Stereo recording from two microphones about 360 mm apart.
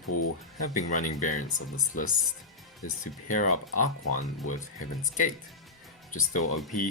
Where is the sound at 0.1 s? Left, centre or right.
Left.